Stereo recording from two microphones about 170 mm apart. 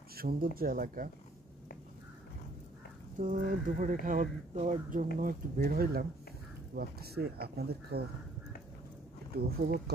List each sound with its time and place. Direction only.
0.1 s speech: 60° right (ahead or behind)
3.2 s speech: 50° right (ahead or behind); by 8.0 s 70° right (ahead or behind)
9.5 s speech: 65° right (ahead or behind)